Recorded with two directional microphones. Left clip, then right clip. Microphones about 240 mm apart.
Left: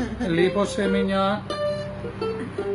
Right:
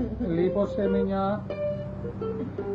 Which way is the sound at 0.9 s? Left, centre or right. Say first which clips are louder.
Left 4 dB; centre.